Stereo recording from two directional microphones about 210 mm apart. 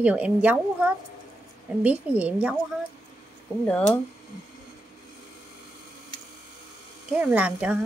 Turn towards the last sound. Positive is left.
turn(degrees=-5)  # may be behind; listen again after turning